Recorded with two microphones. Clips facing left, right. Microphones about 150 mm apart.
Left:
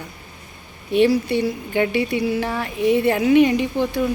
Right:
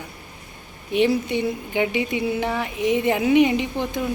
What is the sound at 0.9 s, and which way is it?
Speech, 15° right (ahead or behind).